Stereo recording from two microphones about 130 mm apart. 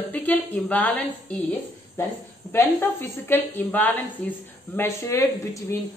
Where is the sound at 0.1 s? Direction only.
10° left (ahead or behind).